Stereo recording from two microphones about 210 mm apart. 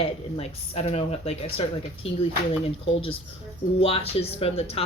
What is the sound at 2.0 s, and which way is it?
Speech, 65° left (ahead or behind).